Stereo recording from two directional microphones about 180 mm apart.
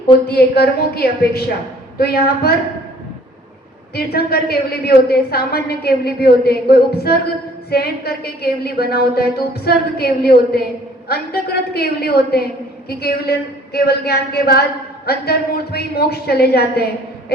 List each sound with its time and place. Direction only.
0.3 s a woman's voice: 60° left (ahead or behind)
3.9 s a woman's voice: 60° left (ahead or behind)